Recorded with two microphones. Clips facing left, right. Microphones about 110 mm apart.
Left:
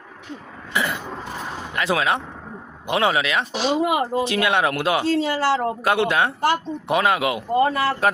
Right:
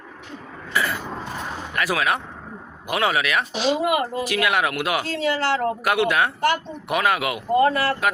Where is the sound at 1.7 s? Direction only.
25° left (ahead or behind).